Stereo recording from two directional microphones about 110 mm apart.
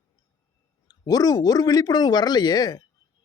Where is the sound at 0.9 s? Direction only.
35° left (ahead or behind).